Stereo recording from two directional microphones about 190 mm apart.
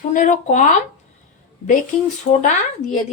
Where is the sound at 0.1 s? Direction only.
45° left (ahead or behind).